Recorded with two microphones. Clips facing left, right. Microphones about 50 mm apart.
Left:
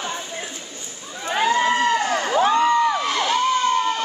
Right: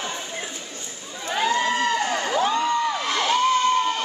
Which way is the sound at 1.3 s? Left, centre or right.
Left.